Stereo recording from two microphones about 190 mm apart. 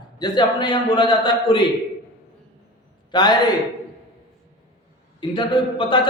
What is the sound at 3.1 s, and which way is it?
Speech, 20° left (ahead or behind).